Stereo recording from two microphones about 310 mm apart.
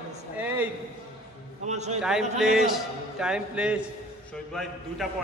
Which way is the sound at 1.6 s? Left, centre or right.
Right.